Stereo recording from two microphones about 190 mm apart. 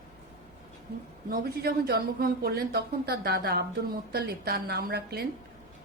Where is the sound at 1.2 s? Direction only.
50° right (ahead or behind).